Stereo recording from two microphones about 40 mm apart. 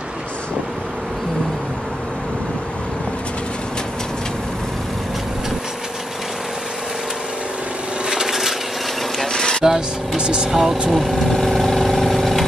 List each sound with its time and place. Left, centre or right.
8.1 s a sound: centre
9.2 s music: centre
9.7 s speech: centre
10.5 s speech: centre
10.9 s vehicle: centre